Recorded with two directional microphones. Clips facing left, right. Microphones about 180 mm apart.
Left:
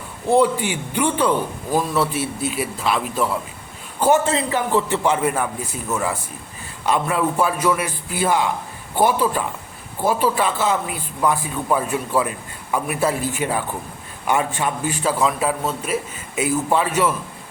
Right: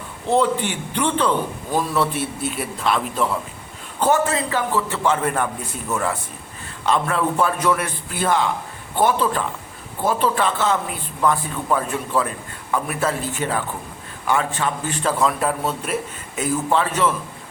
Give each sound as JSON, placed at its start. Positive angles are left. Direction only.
{"t": 0.3, "sound": "a man's voice", "side_deg": 10}
{"t": 4.3, "sound": "a man's voice", "side_deg": 20}
{"t": 5.3, "sound": "a man's voice", "side_deg": 5}